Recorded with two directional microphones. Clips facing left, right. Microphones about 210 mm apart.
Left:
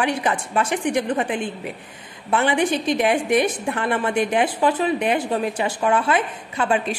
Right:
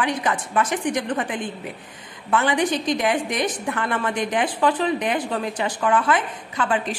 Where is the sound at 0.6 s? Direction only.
10° left (ahead or behind).